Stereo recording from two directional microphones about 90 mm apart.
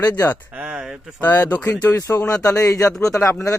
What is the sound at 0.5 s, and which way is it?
Speech, 15° right (ahead or behind).